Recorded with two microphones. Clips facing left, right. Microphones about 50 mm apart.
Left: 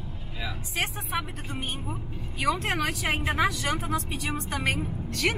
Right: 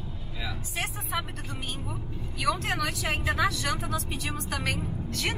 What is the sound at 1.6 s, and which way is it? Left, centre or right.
Speech, left.